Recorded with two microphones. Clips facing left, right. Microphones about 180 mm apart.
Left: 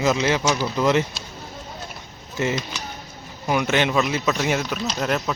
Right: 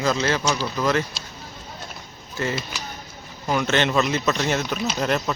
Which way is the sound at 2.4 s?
20° left (ahead or behind).